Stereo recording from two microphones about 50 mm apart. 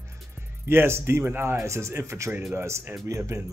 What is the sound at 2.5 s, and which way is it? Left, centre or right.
Speech, right.